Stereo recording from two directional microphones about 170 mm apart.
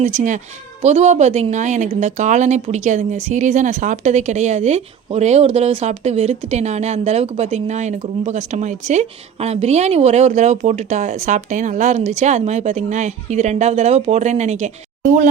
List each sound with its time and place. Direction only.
0.0 s a woman's voice: 45° right (ahead or behind)